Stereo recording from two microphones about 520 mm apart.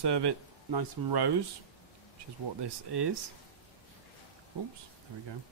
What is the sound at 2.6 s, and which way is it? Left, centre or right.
Speech, right.